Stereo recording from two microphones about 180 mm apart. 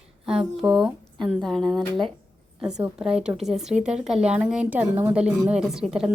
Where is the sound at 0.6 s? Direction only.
5° right (ahead or behind).